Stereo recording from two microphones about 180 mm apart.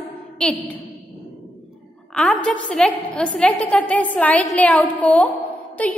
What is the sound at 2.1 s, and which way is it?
A woman's voice, 5° left (ahead or behind).